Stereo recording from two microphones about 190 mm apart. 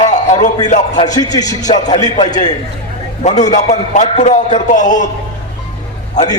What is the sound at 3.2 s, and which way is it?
A man's voice, 40° left (ahead or behind).